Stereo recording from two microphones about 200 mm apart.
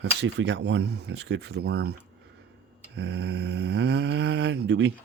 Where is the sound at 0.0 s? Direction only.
60° right (ahead or behind).